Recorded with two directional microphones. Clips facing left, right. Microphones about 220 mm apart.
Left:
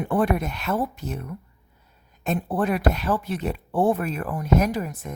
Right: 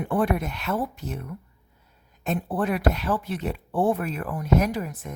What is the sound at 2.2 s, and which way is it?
Speech, 40° left (ahead or behind).